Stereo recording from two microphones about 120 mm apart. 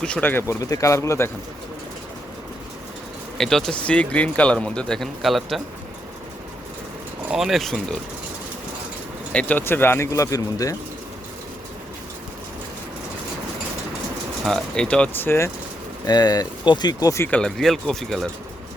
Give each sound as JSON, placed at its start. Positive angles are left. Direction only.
{"t": 0.0, "sound": "speech", "side_deg": 10}
{"t": 0.6, "sound": "speech", "side_deg": 25}
{"t": 3.3, "sound": "speech", "side_deg": 5}
{"t": 7.3, "sound": "speech", "side_deg": -5}
{"t": 9.3, "sound": "speech", "side_deg": 10}
{"t": 14.4, "sound": "speech", "side_deg": 5}
{"t": 16.0, "sound": "speech", "side_deg": 35}
{"t": 17.3, "sound": "speech", "side_deg": 5}